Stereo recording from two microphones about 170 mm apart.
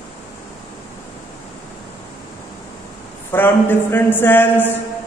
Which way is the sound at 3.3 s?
10° left (ahead or behind).